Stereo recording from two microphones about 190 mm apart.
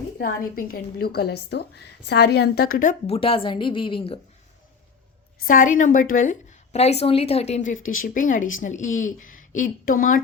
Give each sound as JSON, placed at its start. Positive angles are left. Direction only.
{"t": 0.2, "sound": "a woman's voice", "side_deg": 50}
{"t": 3.1, "sound": "a woman's voice", "side_deg": 30}
{"t": 5.5, "sound": "a woman's voice", "side_deg": 45}
{"t": 6.7, "sound": "a woman's voice", "side_deg": 35}